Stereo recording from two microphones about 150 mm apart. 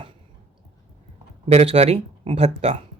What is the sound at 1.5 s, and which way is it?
Speech, 40° right (ahead or behind).